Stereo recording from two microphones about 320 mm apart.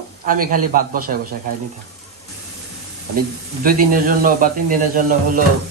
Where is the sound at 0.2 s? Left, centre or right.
Right.